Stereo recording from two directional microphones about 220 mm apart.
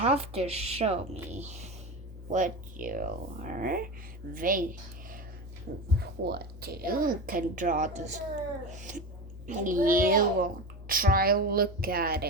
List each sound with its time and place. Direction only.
0.0 s a child's voice: 25° right (ahead or behind); by 12.3 s 45° right (ahead or behind)